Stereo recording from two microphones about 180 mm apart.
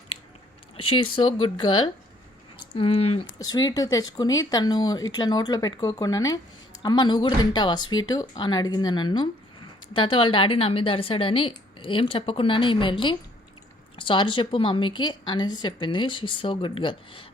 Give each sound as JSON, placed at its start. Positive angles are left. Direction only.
{"t": 0.8, "sound": "speech", "side_deg": 30}
{"t": 3.5, "sound": "speech", "side_deg": 20}